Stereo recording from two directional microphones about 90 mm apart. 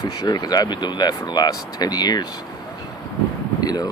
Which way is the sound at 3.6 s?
45° left (ahead or behind).